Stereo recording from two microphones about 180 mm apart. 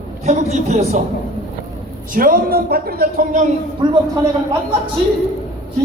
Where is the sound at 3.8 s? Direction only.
25° right (ahead or behind).